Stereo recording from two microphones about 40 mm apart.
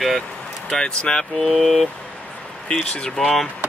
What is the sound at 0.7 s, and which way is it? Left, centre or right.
Speech, centre.